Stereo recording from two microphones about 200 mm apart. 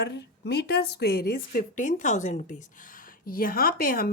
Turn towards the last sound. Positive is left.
turn(degrees=45)  # may be behind; listen again after turning